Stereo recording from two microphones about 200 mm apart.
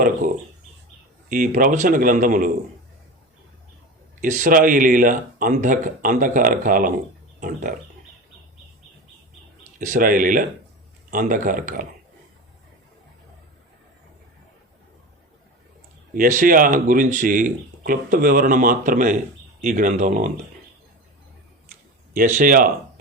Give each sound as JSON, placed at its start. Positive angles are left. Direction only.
{"t": 1.3, "sound": "speech", "side_deg": -45}
{"t": 4.2, "sound": "speech", "side_deg": -40}
{"t": 9.7, "sound": "speech", "side_deg": -45}
{"t": 16.1, "sound": "speech", "side_deg": -40}
{"t": 22.1, "sound": "speech", "side_deg": -45}